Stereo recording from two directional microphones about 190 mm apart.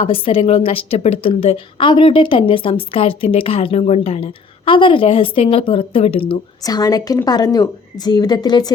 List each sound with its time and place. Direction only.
0.0 s a woman's voice: 30° left (ahead or behind)